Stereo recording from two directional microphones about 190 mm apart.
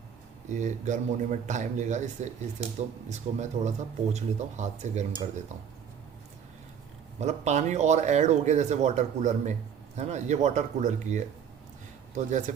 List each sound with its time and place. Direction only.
0.4 s speech: 40° right (ahead or behind)
7.2 s speech: 35° right (ahead or behind)